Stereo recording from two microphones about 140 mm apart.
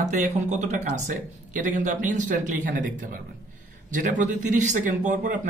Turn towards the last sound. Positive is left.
turn(degrees=-60)  # may be behind; listen again after turning